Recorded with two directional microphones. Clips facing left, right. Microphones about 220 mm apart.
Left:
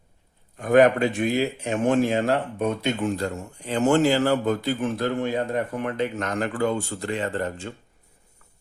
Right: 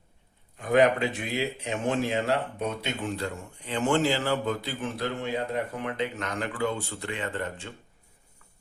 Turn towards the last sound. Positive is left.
turn(degrees=45)  # may be behind; listen again after turning